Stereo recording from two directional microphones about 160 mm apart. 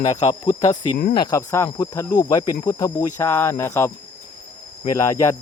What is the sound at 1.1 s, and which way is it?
Speech, 25° left (ahead or behind).